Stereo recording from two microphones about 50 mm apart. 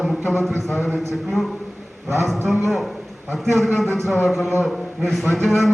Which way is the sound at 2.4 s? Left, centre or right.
Centre.